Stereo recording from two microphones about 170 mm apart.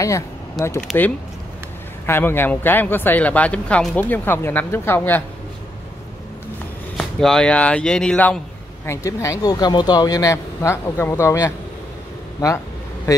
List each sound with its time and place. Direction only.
0.0 s speech: 20° left (ahead or behind)
2.0 s speech: 15° left (ahead or behind)
7.0 s speech: 5° left (ahead or behind)
8.8 s speech: 15° left (ahead or behind)